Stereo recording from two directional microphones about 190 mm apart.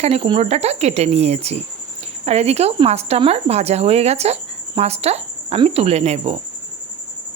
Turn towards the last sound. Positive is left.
turn(degrees=-35)  # may be behind; listen again after turning